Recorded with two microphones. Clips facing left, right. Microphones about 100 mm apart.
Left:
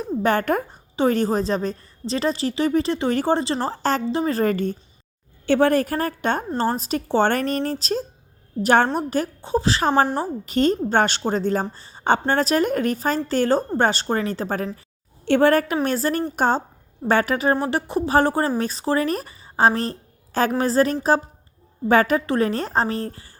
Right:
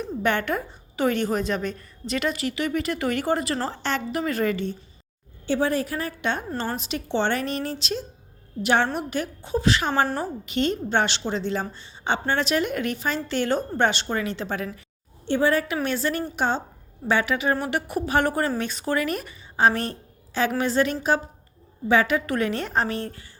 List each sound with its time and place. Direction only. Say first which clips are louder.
0.2 s speech: left 4 dB; 35° left (ahead or behind)
0.9 s a woman's voice: left 4 dB; 35° left (ahead or behind)
5.5 s a woman's voice: left 6 dB; 60° left (ahead or behind); by 14.7 s 40° left (ahead or behind)
15.2 s a woman's voice: left 5 dB; 65° left (ahead or behind); by 23.3 s 35° left (ahead or behind)